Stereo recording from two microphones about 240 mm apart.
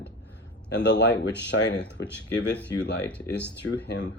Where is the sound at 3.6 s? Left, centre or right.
Left.